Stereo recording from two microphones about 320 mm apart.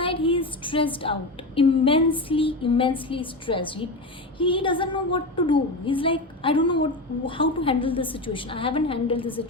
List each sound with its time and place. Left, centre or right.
0.0 s a woman's voice: centre